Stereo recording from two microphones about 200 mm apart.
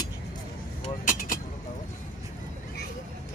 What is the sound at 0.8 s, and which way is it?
Vehicle, 40° left (ahead or behind).